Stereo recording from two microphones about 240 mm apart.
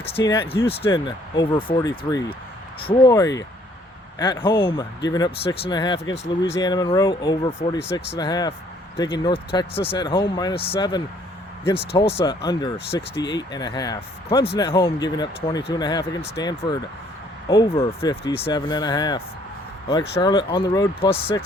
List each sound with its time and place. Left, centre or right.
0.2 s speech: centre
17.5 s speech: centre